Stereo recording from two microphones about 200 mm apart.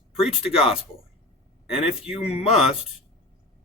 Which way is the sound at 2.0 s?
30° left (ahead or behind).